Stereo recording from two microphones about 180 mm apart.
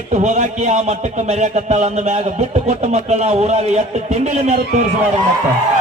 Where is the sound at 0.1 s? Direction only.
40° right (ahead or behind).